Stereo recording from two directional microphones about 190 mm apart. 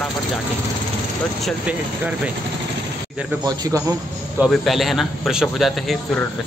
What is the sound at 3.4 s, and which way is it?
Speech, 20° right (ahead or behind).